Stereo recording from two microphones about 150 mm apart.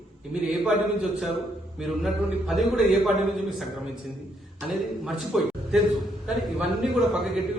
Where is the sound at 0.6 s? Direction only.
Centre (ahead or behind).